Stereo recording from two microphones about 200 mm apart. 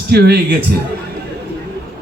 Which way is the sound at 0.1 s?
55° right (ahead or behind).